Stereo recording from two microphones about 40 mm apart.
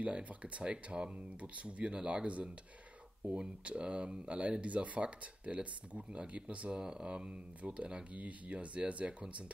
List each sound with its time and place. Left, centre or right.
0.0 s speech: right
6.8 s speech: centre
8.1 s speech: right